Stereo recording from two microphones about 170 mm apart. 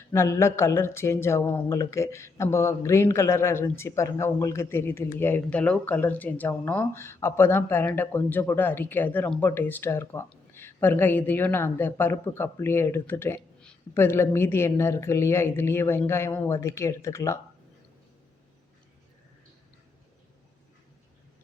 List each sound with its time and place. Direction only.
0.1 s speech: 15° left (ahead or behind)